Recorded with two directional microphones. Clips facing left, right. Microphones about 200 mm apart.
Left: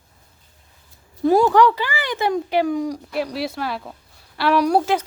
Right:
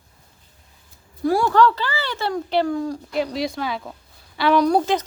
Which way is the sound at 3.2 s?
5° left (ahead or behind).